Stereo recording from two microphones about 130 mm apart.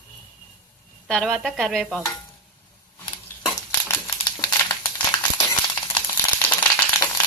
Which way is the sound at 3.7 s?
25° left (ahead or behind).